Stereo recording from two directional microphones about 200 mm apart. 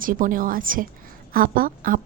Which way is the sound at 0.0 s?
45° right (ahead or behind).